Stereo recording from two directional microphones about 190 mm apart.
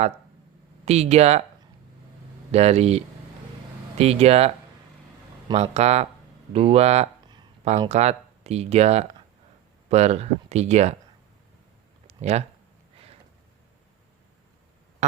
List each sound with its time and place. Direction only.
0.9 s speech: 35° right (ahead or behind)
2.5 s speech: 35° right (ahead or behind)
5.5 s speech: 35° right (ahead or behind)
12.0 s a sound: 35° right (ahead or behind)